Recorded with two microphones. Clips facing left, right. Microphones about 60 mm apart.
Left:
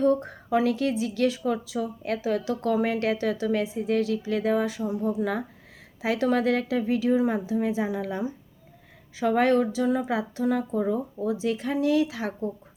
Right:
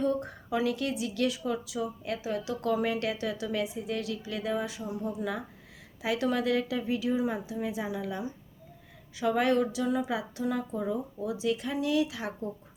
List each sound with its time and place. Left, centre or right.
0.0 s speech: left